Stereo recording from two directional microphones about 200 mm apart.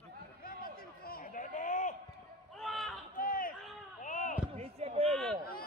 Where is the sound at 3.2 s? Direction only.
45° left (ahead or behind).